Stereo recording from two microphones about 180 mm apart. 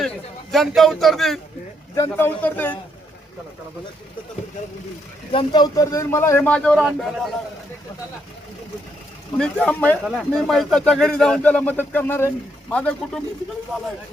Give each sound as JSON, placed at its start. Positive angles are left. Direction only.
{"t": 0.5, "sound": "speech", "side_deg": 0}
{"t": 2.0, "sound": "speech", "side_deg": 10}
{"t": 5.3, "sound": "speech", "side_deg": 25}
{"t": 9.4, "sound": "speech", "side_deg": 5}
{"t": 13.7, "sound": "speech", "side_deg": -5}